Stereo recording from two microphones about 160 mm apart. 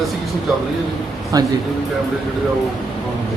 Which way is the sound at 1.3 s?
25° right (ahead or behind).